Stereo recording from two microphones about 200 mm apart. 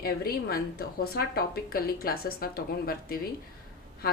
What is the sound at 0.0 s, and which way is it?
A woman's voice, 50° left (ahead or behind).